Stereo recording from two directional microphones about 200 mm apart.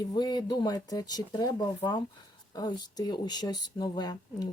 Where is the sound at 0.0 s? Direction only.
20° left (ahead or behind).